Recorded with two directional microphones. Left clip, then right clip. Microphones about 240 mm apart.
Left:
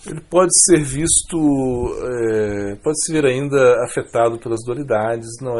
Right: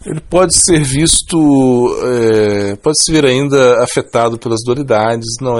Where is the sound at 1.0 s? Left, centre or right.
Right.